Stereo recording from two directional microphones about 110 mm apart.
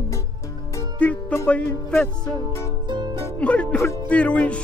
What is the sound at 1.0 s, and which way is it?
Music, 10° left (ahead or behind).